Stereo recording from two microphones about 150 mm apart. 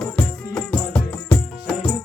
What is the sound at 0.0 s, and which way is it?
Music, 5° left (ahead or behind).